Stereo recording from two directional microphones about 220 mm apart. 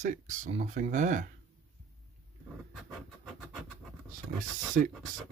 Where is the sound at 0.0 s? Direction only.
35° right (ahead or behind).